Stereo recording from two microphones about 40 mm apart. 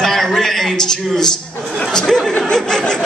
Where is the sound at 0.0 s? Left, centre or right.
Centre.